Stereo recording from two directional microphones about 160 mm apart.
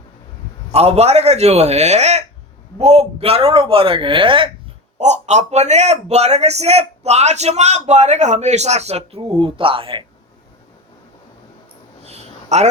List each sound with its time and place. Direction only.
0.7 s speech: 40° right (ahead or behind)
4.9 s a man's voice: 45° right (ahead or behind)
12.0 s a sound: 45° right (ahead or behind)